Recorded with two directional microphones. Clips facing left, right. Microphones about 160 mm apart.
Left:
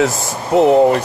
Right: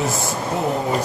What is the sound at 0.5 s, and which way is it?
Speech, 75° left (ahead or behind).